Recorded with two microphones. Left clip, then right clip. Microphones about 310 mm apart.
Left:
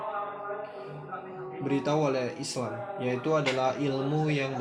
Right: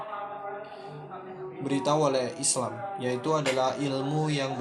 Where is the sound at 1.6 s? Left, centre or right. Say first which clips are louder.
Right 2 dB; right.